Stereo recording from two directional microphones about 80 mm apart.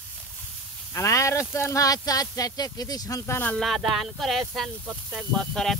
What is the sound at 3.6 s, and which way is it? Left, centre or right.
Speech, centre.